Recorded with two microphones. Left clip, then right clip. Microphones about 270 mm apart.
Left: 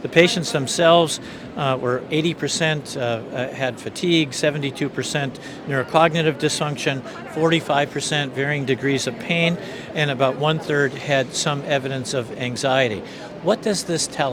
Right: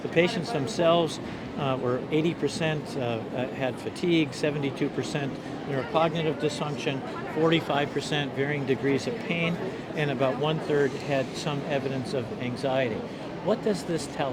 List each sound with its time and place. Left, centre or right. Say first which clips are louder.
0.1 s speech: left 9 dB; left
5.7 s a man's voice: left 9 dB; left
7.4 s speech: left 6 dB; left